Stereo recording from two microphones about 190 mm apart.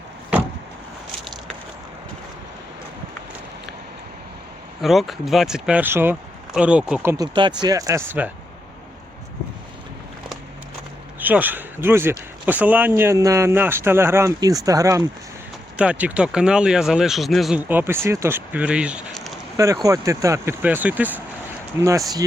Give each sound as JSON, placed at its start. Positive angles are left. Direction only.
{"t": 4.8, "sound": "speech", "side_deg": 0}
{"t": 7.3, "sound": "speech", "side_deg": -25}
{"t": 11.2, "sound": "speech", "side_deg": -10}
{"t": 15.8, "sound": "speech", "side_deg": -5}
{"t": 19.5, "sound": "speech", "side_deg": -15}